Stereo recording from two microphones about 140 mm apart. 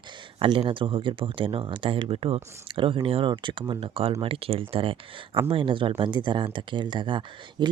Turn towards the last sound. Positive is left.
turn(degrees=-35)  # may be behind; listen again after turning